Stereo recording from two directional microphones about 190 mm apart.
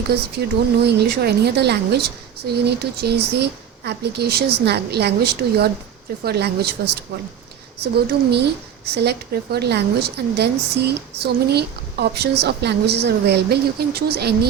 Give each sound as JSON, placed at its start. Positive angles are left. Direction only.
{"t": 0.9, "sound": "a woman's voice", "side_deg": -60}